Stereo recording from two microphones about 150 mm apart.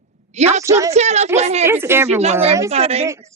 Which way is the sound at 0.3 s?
50° right (ahead or behind).